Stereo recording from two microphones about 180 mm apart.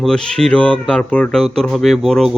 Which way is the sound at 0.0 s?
5° left (ahead or behind).